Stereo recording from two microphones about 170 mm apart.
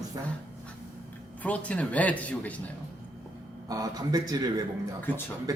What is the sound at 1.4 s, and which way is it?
Speech, 10° left (ahead or behind).